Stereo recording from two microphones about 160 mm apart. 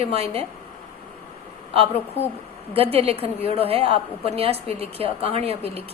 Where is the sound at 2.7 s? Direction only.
40° right (ahead or behind).